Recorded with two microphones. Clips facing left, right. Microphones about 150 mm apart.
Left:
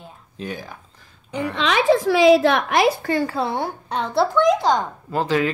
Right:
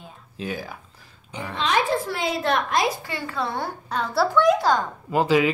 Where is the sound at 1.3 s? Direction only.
70° left (ahead or behind).